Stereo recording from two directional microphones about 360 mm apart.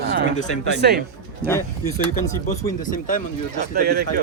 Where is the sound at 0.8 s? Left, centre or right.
Right.